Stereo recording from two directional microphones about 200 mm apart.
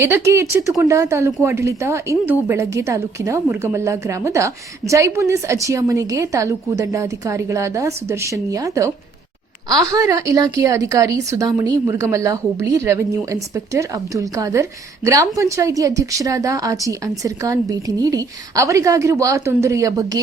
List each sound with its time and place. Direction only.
0.0 s a woman's voice: 15° right (ahead or behind)